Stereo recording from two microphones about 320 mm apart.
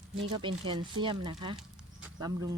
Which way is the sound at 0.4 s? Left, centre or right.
Centre.